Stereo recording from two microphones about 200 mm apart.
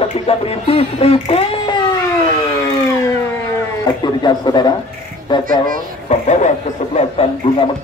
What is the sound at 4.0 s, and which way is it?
A man's voice, 20° left (ahead or behind).